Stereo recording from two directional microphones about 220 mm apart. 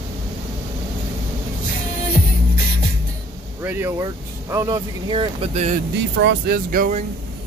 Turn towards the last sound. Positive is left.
turn(degrees=-40)  # may be behind; listen again after turning